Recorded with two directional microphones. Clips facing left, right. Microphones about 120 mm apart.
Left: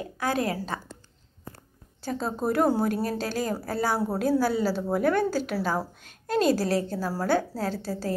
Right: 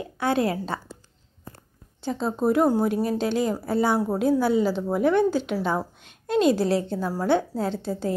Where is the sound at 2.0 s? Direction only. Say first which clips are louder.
Right 4 dB; 20° right (ahead or behind).